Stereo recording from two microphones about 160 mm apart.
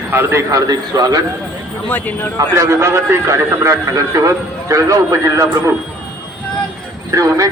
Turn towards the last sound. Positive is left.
turn(degrees=-20)  # may be behind; listen again after turning